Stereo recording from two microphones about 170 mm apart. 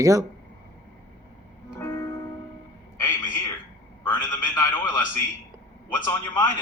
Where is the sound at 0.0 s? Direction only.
20° right (ahead or behind).